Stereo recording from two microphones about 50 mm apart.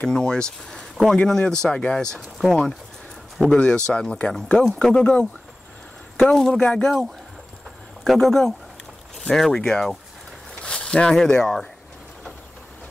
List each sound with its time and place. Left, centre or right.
0.0 s speech: centre
2.1 s speech: centre
8.0 s speech: centre